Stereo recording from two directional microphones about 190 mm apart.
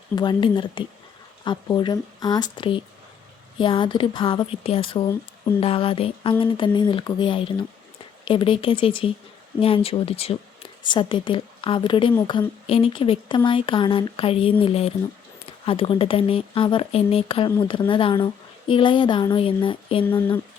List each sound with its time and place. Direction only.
0.2 s speech: 25° left (ahead or behind)